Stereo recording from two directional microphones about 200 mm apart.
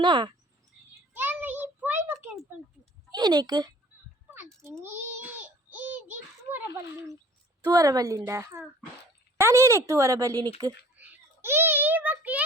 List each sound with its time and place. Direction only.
0.0 s speech: 25° right (ahead or behind)
1.1 s a sound: 10° right (ahead or behind)
3.1 s speech: 20° right (ahead or behind)
4.8 s child singing: 10° right (ahead or behind)
7.7 s a child's voice: 20° right (ahead or behind)